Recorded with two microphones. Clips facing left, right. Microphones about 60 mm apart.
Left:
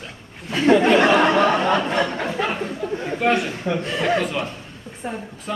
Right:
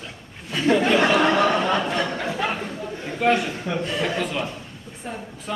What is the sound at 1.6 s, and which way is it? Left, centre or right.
Speech, left.